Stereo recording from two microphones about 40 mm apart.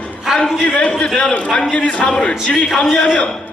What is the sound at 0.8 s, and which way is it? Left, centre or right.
A man's voice, left.